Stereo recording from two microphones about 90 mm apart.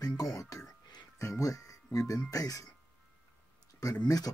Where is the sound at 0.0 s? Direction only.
45° left (ahead or behind).